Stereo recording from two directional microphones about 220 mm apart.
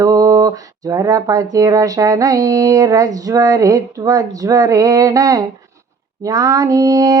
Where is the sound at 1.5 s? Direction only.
15° right (ahead or behind).